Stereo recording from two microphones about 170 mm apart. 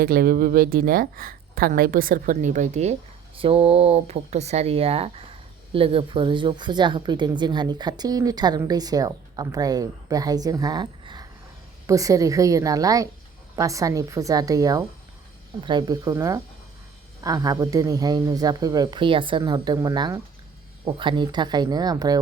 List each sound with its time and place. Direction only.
0.0 s a woman's voice: 60° right (ahead or behind); by 2.9 s 45° right (ahead or behind)
3.3 s a woman's voice: 35° right (ahead or behind)